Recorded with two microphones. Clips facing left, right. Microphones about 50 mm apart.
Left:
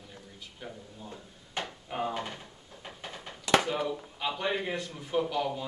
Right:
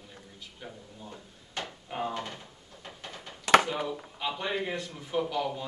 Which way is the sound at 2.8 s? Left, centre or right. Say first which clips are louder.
Left 1 dB; centre.